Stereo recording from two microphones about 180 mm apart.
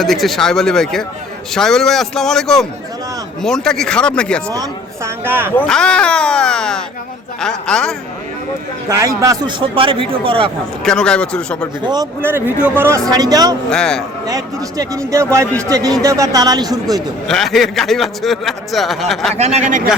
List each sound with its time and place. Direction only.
0.0 s a man's voice: centre (ahead or behind)
4.5 s a man's voice: 15° right (ahead or behind)
5.5 s a man's voice: 5° left (ahead or behind)
8.9 s a man's voice: 20° right (ahead or behind)
10.8 s a man's voice: 5° left (ahead or behind)
11.8 s a man's voice: 25° right (ahead or behind)
12.2 s a man's voice: 10° right (ahead or behind)
13.7 s a man's voice: 5° left (ahead or behind)
14.3 s a man's voice: 20° right (ahead or behind)
17.2 s a man's voice: centre (ahead or behind)
19.4 s speech: 35° right (ahead or behind)